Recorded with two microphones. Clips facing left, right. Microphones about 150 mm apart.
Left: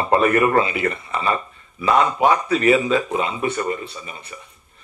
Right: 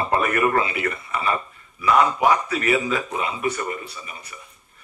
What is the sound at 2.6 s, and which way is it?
A man's voice, 30° left (ahead or behind).